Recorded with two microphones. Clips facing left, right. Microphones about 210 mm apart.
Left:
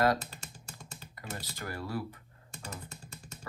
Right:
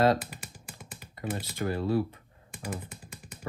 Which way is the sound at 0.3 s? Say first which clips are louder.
Right 3 dB; 15° right (ahead or behind).